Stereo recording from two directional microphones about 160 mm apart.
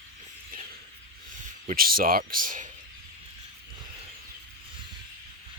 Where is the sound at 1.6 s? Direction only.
60° right (ahead or behind).